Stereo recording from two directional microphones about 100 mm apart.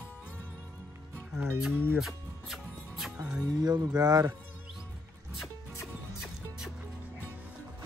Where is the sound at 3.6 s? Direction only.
40° right (ahead or behind).